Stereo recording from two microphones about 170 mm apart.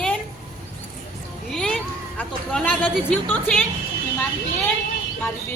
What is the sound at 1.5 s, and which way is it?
Speech, 5° left (ahead or behind).